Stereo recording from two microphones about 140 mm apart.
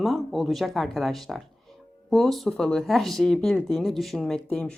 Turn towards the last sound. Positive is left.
turn(degrees=5)  # may be behind; listen again after turning